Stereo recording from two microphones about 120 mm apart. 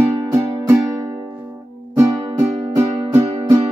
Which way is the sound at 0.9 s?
10° right (ahead or behind).